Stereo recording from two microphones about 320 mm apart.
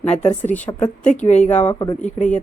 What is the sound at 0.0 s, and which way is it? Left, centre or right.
Speech, left.